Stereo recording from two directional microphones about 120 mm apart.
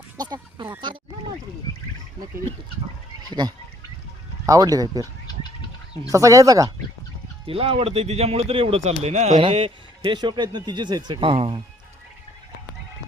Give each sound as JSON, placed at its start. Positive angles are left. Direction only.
{"t": 0.2, "sound": "speech", "side_deg": -35}
{"t": 3.2, "sound": "speech", "side_deg": -35}
{"t": 5.2, "sound": "gargling", "side_deg": 35}
{"t": 6.1, "sound": "speech", "side_deg": -25}
{"t": 7.4, "sound": "speech", "side_deg": -50}
{"t": 9.4, "sound": "speech", "side_deg": -50}